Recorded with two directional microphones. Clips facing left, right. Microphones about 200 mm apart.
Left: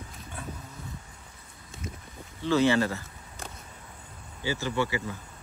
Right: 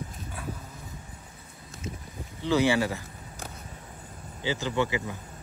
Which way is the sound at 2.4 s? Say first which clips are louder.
Left 1 dB; 15° right (ahead or behind).